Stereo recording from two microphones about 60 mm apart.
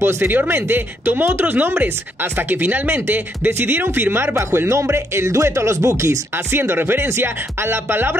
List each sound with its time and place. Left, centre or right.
0.0 s speech: right